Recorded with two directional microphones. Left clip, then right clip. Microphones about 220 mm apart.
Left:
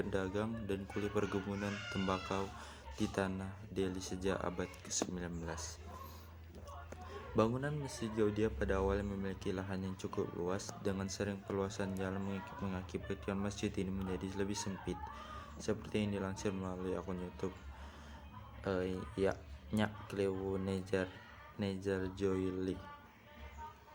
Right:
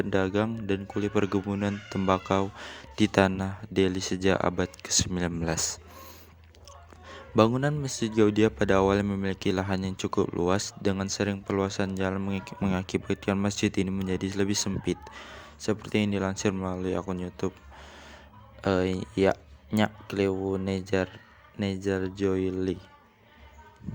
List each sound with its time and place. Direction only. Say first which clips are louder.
0.0 s a man's voice: right 12 dB; 40° right (ahead or behind)
7.1 s a man's voice: right 11 dB; 40° right (ahead or behind)
18.6 s a man's voice: right 12 dB; 40° right (ahead or behind)